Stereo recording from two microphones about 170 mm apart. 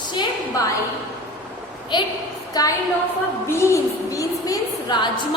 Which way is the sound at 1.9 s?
25° left (ahead or behind).